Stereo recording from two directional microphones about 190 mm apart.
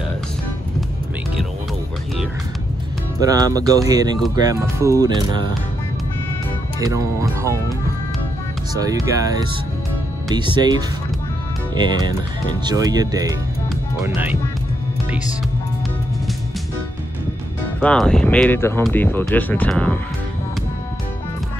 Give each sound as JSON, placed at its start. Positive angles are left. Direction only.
{"t": 3.2, "sound": "speech", "side_deg": -20}
{"t": 6.8, "sound": "speech", "side_deg": -15}
{"t": 8.7, "sound": "speech", "side_deg": -20}
{"t": 12.6, "sound": "speech", "side_deg": -20}
{"t": 17.7, "sound": "speech", "side_deg": 5}